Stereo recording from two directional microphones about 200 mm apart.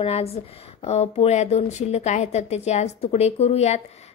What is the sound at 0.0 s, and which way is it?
A woman's voice, 30° left (ahead or behind).